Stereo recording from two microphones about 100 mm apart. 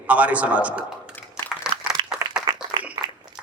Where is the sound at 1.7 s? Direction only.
40° right (ahead or behind).